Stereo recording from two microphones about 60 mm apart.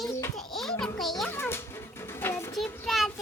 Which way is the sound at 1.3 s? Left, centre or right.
Left.